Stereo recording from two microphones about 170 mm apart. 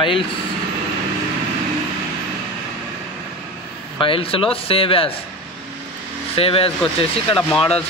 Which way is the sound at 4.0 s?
30° left (ahead or behind).